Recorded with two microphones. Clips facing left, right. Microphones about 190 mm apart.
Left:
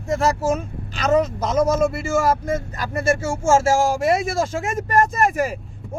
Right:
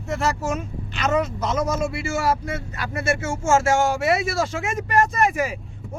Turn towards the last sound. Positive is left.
turn(degrees=0)  # may be behind; listen again after turning